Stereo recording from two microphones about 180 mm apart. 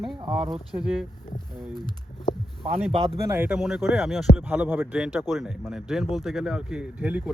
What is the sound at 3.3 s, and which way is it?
Speech, 10° right (ahead or behind).